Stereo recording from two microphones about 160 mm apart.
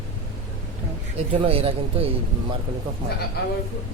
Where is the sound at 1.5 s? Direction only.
35° right (ahead or behind).